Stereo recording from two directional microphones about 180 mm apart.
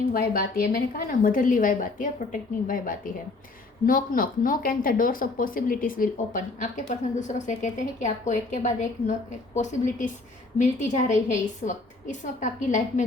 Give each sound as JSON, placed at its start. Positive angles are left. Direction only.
{"t": 0.1, "sound": "speech", "side_deg": 55}